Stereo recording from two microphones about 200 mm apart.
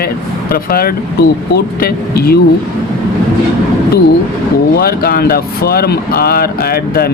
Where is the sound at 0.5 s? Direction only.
50° left (ahead or behind).